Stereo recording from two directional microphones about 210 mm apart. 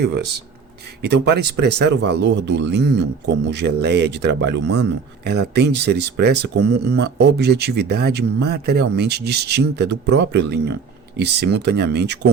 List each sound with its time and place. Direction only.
0.0 s speech: 50° right (ahead or behind)